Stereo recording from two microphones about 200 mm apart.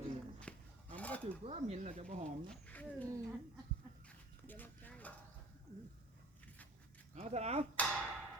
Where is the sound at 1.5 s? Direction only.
35° right (ahead or behind).